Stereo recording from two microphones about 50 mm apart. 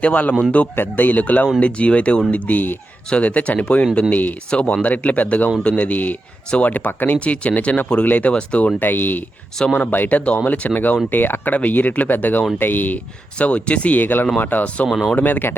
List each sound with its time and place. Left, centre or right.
0.0 s speech: left
0.8 s speech: left
2.3 s speech: left
4.5 s speech: left
7.2 s speech: left
8.8 s speech: left
11.1 s speech: left
13.4 s speech: left
14.8 s speech: centre
15.1 s speech: left